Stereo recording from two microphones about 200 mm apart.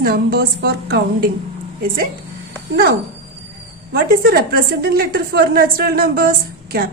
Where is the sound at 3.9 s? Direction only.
45° right (ahead or behind).